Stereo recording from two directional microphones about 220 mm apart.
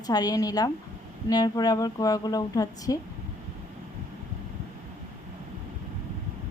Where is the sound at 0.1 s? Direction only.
15° left (ahead or behind).